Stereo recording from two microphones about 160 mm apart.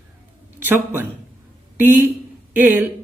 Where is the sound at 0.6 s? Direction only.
10° right (ahead or behind).